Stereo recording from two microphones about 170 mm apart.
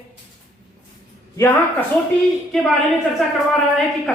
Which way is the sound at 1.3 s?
15° left (ahead or behind).